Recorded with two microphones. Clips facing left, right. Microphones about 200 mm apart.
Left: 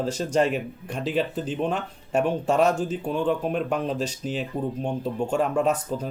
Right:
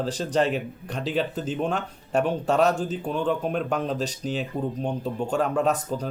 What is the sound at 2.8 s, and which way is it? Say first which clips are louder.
Speech: left 1 dB; 5° left (ahead or behind).